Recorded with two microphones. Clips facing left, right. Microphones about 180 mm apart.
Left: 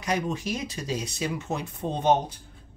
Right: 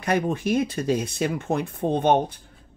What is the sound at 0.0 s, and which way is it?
Speech, 55° right (ahead or behind).